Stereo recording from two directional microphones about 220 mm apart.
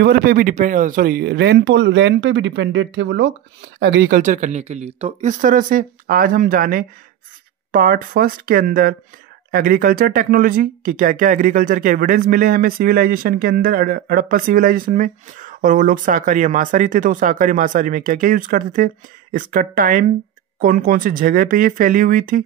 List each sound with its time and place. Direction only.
0.0 s speech: 40° right (ahead or behind)